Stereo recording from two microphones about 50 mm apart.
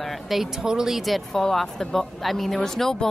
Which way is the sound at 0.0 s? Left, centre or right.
Centre.